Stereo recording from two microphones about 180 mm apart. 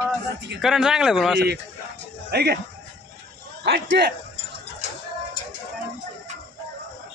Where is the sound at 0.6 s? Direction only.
Centre (ahead or behind).